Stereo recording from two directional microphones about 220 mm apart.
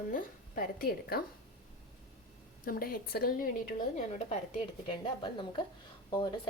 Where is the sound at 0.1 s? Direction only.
40° left (ahead or behind).